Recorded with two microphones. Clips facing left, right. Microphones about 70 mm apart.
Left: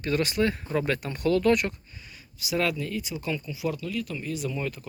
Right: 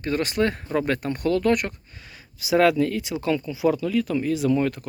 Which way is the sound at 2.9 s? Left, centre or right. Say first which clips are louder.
Right 7 dB; right.